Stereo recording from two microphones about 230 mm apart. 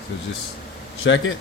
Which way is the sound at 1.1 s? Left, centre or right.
Left.